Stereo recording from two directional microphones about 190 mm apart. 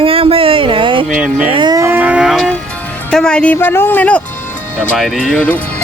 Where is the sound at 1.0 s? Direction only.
5° right (ahead or behind).